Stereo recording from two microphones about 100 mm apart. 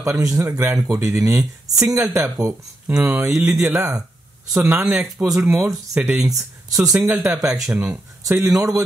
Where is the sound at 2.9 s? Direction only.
15° right (ahead or behind).